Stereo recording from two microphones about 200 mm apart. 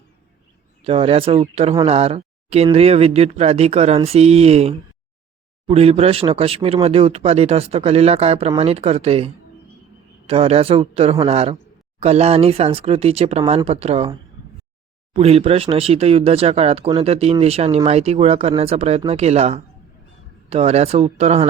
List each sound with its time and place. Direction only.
0.9 s speech: 30° right (ahead or behind)
15.1 s speech: 30° right (ahead or behind)